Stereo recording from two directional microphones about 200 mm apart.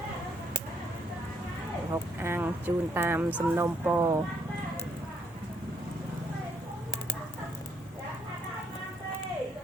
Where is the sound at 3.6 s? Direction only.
10° right (ahead or behind).